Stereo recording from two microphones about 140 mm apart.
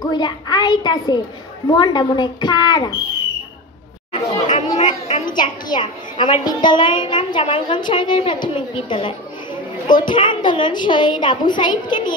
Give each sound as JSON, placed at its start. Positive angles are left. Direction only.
{"t": 0.0, "sound": "a woman's voice", "side_deg": 30}
{"t": 4.5, "sound": "chatter", "side_deg": 50}
{"t": 5.2, "sound": "a woman's voice", "side_deg": 30}